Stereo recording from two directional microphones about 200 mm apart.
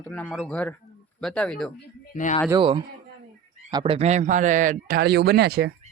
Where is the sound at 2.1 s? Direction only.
40° left (ahead or behind).